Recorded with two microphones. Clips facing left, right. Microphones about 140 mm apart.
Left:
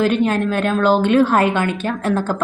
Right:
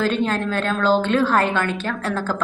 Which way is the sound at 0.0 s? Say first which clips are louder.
Left 4 dB; 15° left (ahead or behind).